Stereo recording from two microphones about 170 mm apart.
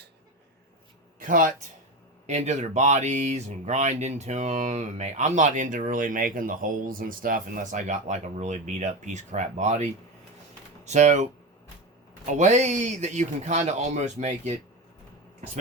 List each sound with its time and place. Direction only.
1.2 s speech: 50° right (ahead or behind)